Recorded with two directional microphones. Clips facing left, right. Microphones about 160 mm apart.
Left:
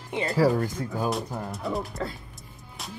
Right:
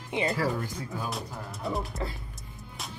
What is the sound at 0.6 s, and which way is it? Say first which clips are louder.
Speech: left 6 dB; 50° left (ahead or behind).